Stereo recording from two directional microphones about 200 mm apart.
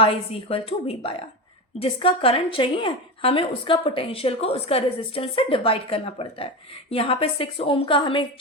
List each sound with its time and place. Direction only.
0.0 s a woman's voice: 30° left (ahead or behind)